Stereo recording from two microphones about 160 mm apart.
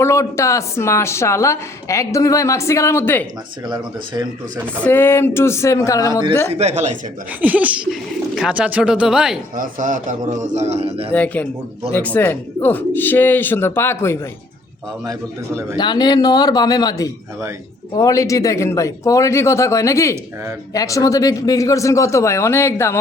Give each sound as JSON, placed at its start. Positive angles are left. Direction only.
{"t": 0.0, "sound": "a woman's voice", "side_deg": 15}
{"t": 3.7, "sound": "speech", "side_deg": -25}
{"t": 4.8, "sound": "a woman's voice", "side_deg": 15}
{"t": 6.5, "sound": "a man's voice", "side_deg": -45}
{"t": 7.4, "sound": "speech", "side_deg": -10}
{"t": 9.6, "sound": "a man's voice", "side_deg": -55}
{"t": 11.1, "sound": "a woman's voice", "side_deg": 10}
{"t": 15.8, "sound": "a man's voice", "side_deg": 25}